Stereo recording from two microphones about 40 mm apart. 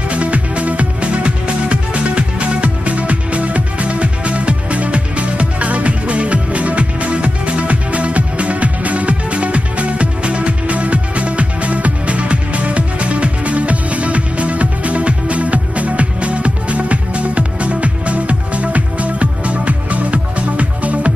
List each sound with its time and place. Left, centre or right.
0.1 s music: right